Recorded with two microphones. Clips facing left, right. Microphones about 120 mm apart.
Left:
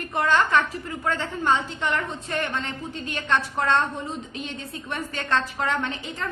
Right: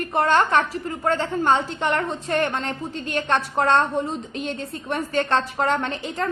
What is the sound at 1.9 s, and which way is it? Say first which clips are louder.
A woman's voice: right 4 dB; 55° right (ahead or behind).